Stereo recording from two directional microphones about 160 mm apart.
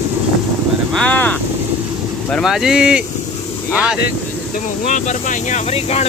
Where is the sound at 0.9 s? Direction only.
10° left (ahead or behind).